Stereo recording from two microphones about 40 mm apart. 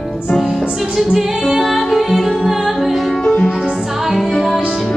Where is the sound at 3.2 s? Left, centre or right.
Centre.